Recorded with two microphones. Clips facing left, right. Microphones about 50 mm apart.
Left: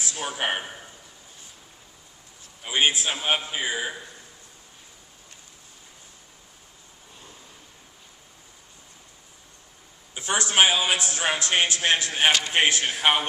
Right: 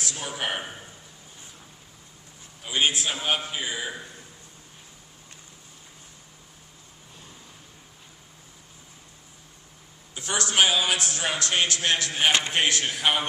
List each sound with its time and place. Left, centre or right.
0.0 s a man's voice: left
2.6 s a man's voice: left
10.2 s a man's voice: left
12.3 s a man's voice: right
12.5 s a man's voice: left